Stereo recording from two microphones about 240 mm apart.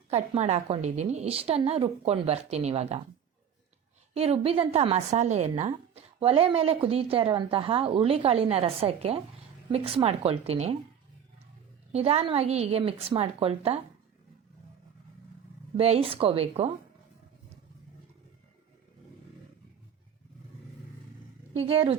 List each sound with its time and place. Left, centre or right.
0.1 s a woman's voice: right
4.1 s a woman's voice: right
11.9 s a woman's voice: right
15.8 s a woman's voice: right
21.5 s speech: right